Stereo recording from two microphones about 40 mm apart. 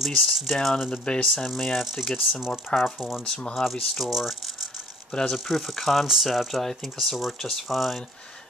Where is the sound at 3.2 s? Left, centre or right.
Centre.